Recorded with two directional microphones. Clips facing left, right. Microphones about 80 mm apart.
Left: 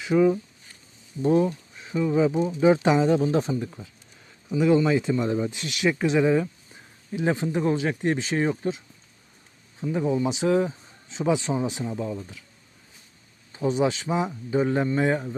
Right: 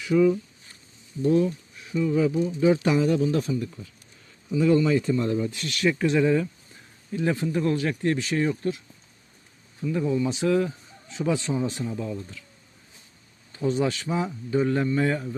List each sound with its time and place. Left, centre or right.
0.0 s speech: left
9.9 s speech: left
13.5 s speech: centre